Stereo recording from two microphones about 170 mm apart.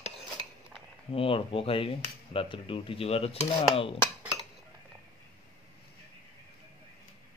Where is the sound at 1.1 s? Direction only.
35° left (ahead or behind).